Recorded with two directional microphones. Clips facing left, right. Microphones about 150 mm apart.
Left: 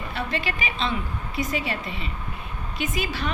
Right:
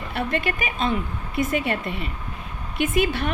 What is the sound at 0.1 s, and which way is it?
A woman's voice, 55° right (ahead or behind).